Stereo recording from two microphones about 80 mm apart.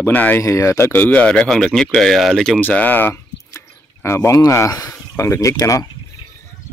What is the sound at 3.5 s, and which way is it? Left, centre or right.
Speech, left.